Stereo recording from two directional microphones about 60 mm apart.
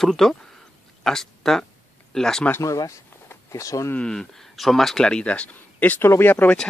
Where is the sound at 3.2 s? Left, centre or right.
Left.